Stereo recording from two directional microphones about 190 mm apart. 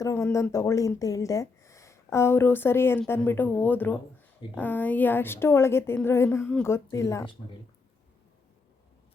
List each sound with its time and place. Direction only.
0.0 s a woman's voice: 15° left (ahead or behind)